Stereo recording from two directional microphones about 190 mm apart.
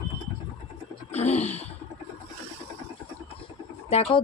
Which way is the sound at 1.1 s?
35° left (ahead or behind).